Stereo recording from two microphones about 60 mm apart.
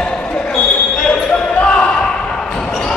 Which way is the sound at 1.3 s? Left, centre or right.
Centre.